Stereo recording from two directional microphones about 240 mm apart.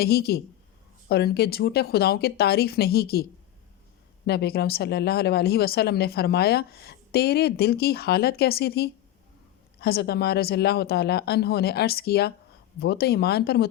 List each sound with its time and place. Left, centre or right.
0.0 s speech: left
4.3 s speech: left